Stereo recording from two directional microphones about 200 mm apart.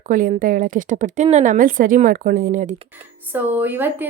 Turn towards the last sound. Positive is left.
turn(degrees=-10)  # may be behind; listen again after turning